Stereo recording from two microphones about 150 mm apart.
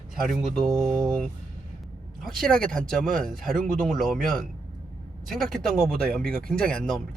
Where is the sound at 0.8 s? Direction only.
20° right (ahead or behind).